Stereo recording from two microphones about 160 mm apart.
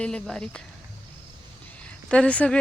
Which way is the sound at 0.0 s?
5° left (ahead or behind).